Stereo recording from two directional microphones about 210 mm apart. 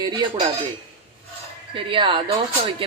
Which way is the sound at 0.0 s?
20° right (ahead or behind).